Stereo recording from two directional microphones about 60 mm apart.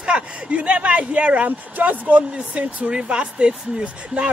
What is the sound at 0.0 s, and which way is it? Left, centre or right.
Speech, centre.